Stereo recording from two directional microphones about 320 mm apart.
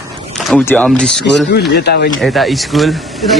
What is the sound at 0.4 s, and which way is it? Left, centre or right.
Speech, centre.